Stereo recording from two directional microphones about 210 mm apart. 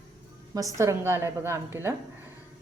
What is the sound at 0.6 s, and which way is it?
A woman's voice, 15° right (ahead or behind).